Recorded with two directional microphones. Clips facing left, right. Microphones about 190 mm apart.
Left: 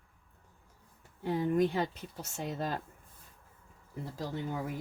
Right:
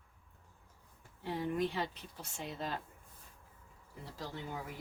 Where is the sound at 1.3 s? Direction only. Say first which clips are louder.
Left 6 dB; 45° left (ahead or behind).